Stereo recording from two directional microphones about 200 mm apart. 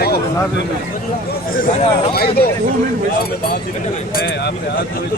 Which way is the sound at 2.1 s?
50° left (ahead or behind).